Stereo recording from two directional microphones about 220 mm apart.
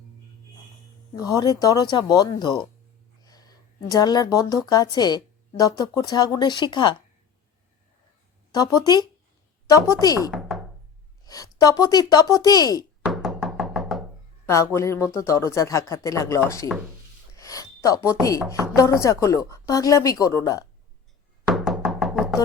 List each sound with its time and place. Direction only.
1.1 s a woman's voice: 15° left (ahead or behind)
8.5 s speech: 15° left (ahead or behind)
10.5 s chopping: centre (ahead or behind)
11.3 s speech: 15° left (ahead or behind)
13.1 s music: centre (ahead or behind)
14.4 s speech: 15° left (ahead or behind)
21.4 s music: centre (ahead or behind)